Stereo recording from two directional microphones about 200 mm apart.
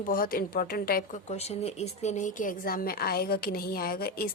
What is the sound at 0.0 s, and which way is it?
A woman's voice, 45° left (ahead or behind).